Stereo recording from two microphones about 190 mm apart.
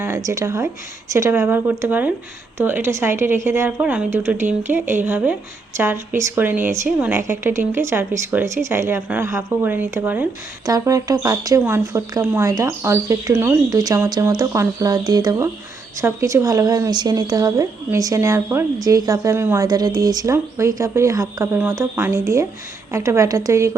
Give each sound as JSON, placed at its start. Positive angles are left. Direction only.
{"t": 0.0, "sound": "speech", "side_deg": -15}